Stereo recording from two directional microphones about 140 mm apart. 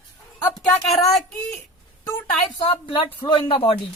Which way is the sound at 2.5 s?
40° left (ahead or behind).